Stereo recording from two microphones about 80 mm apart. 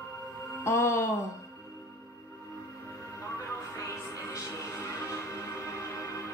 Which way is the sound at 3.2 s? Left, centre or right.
Left.